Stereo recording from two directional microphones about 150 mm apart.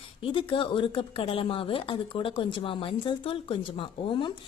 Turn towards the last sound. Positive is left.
turn(degrees=35)  # may be behind; listen again after turning